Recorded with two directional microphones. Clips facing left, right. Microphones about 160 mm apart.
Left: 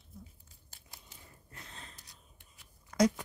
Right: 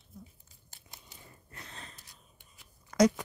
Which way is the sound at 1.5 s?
75° right (ahead or behind).